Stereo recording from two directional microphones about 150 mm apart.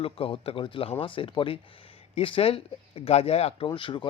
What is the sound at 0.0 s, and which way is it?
Speech, 40° left (ahead or behind).